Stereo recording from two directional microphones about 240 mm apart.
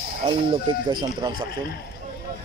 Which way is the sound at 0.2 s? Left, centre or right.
Right.